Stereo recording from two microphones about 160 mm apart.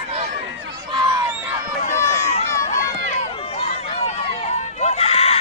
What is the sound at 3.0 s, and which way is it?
Run, 45° left (ahead or behind).